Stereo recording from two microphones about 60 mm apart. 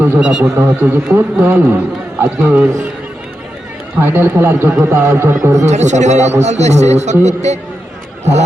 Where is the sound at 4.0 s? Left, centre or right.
Right.